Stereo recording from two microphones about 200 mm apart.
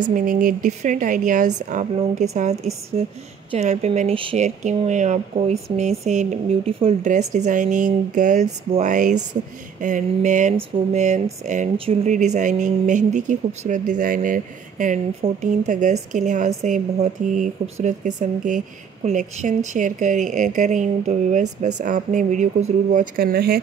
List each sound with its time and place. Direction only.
0.1 s speech: 45° right (ahead or behind)
11.7 s speech: 30° right (ahead or behind); by 23.6 s 50° right (ahead or behind)